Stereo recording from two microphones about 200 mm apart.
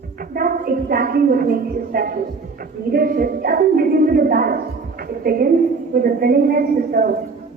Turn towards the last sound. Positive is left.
turn(degrees=-45)  # may be behind; listen again after turning